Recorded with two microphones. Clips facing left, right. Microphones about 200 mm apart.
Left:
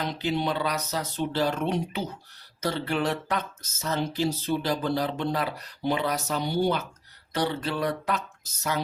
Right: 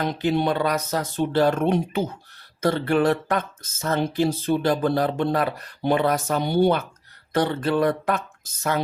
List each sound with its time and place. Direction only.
0.0 s speech: 50° right (ahead or behind)